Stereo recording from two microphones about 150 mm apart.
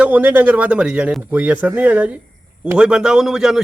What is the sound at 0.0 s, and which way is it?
A man's voice, 10° right (ahead or behind).